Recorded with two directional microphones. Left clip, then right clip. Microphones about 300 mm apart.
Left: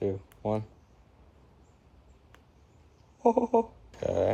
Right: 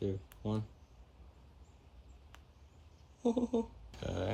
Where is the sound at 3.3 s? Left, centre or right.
Centre.